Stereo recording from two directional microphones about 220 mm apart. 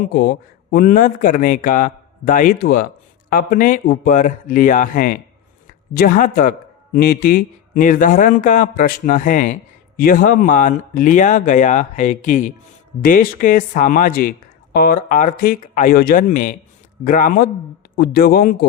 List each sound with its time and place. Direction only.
0.0 s a man's voice: 45° left (ahead or behind)